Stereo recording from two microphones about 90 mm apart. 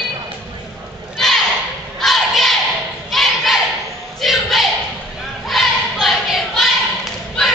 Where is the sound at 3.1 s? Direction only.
Centre (ahead or behind).